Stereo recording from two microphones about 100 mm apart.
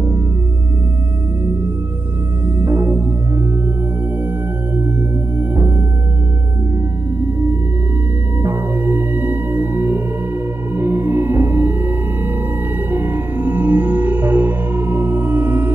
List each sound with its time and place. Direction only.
1.4 s music: 20° right (ahead or behind)
7.2 s music: 20° right (ahead or behind)
12.9 s music: 20° right (ahead or behind)